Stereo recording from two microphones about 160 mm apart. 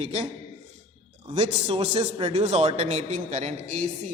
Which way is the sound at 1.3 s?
40° right (ahead or behind).